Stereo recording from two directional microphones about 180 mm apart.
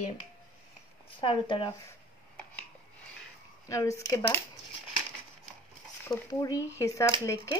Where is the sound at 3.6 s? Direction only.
15° left (ahead or behind).